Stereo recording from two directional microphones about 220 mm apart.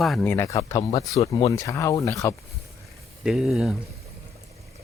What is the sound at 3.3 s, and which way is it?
Speech, centre (ahead or behind).